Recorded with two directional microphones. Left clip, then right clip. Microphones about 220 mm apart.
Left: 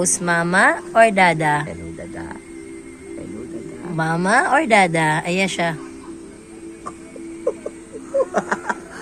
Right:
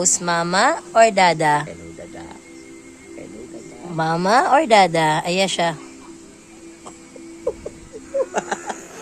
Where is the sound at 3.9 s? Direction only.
20° right (ahead or behind).